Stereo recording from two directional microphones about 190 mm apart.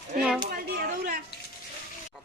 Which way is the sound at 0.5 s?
50° right (ahead or behind).